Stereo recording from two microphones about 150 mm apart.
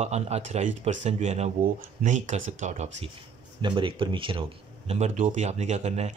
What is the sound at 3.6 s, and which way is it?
Speech, 30° right (ahead or behind).